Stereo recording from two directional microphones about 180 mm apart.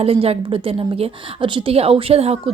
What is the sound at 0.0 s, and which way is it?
A woman's voice, 35° right (ahead or behind).